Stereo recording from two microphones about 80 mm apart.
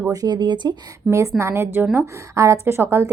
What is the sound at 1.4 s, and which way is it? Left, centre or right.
A woman's voice, right.